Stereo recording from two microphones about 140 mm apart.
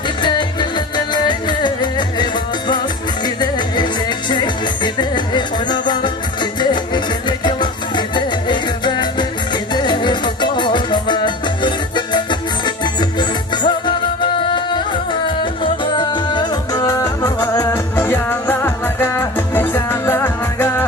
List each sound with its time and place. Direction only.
0.2 s music: 35° left (ahead or behind)
3.3 s music: 35° left (ahead or behind); by 20.8 s 15° left (ahead or behind)